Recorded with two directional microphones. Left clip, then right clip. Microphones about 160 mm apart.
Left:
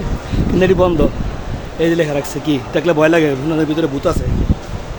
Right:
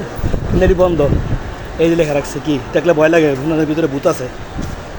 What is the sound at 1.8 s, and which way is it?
A man's voice, 10° left (ahead or behind).